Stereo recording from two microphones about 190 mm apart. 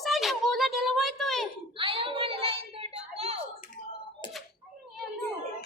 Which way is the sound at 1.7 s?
30° right (ahead or behind).